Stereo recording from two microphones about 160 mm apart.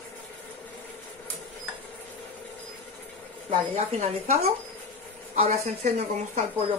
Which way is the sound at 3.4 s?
40° right (ahead or behind).